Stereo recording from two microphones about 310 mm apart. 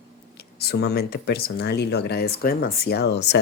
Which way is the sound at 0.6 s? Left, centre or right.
Left.